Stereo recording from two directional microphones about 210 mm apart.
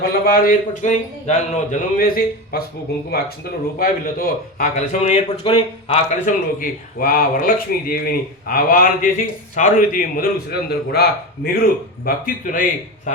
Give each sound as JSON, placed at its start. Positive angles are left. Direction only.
{"t": 0.0, "sound": "a man's voice", "side_deg": 45}
{"t": 3.8, "sound": "a man's voice", "side_deg": 45}
{"t": 13.1, "sound": "a sound", "side_deg": 35}